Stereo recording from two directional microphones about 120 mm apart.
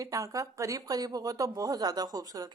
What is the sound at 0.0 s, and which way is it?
Speech, 30° right (ahead or behind).